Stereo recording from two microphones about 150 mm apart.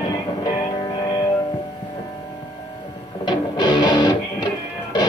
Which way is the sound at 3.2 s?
30° left (ahead or behind).